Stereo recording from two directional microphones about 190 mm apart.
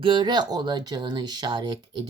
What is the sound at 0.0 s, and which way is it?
A woman's voice, 25° right (ahead or behind).